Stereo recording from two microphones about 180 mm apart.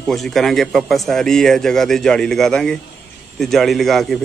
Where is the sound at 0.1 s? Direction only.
Centre (ahead or behind).